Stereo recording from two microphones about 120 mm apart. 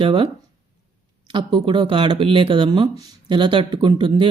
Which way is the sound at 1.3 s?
40° right (ahead or behind).